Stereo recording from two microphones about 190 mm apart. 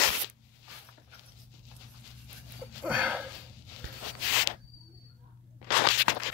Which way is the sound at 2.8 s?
5° right (ahead or behind).